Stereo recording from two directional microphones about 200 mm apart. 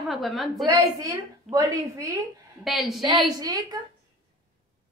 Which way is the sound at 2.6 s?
Centre (ahead or behind).